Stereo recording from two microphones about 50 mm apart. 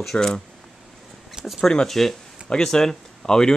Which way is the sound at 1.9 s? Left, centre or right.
Centre.